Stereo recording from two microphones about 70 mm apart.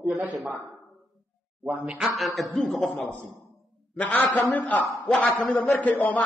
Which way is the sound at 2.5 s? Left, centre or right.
Centre.